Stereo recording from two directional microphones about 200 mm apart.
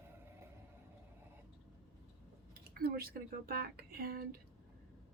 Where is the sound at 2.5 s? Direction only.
50° right (ahead or behind).